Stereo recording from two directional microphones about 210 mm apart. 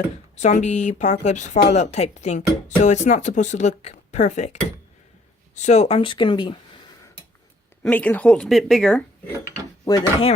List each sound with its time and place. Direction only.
0.3 s speech: 35° left (ahead or behind)
5.5 s speech: 35° left (ahead or behind)
7.8 s speech: 5° left (ahead or behind)
9.8 s speech: 20° left (ahead or behind)